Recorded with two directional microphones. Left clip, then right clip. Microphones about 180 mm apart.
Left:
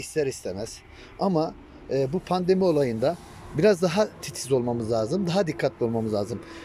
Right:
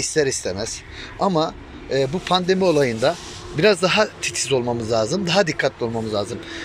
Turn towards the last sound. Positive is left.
turn(degrees=35)  # may be behind; listen again after turning